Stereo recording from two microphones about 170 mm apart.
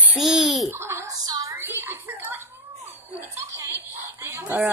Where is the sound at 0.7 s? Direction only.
15° right (ahead or behind).